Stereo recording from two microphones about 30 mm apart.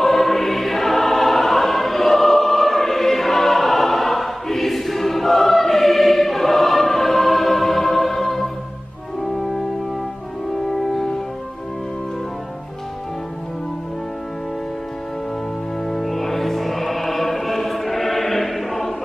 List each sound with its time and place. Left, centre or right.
0.0 s choir: centre
9.2 s brass instrument: centre
10.5 s music: centre
15.9 s music: centre